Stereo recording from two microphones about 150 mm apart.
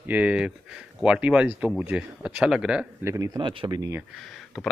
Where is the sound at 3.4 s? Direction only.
35° right (ahead or behind).